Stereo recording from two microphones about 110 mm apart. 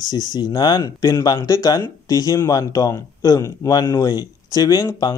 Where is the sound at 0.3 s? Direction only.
35° left (ahead or behind).